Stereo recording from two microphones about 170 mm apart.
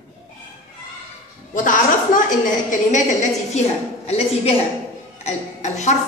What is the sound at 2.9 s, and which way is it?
A woman's voice, 45° left (ahead or behind).